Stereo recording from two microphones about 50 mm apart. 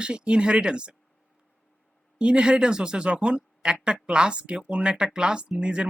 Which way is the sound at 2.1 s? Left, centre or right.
Centre.